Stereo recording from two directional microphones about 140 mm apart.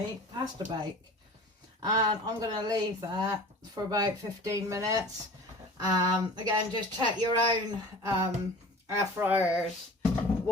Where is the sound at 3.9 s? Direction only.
30° right (ahead or behind).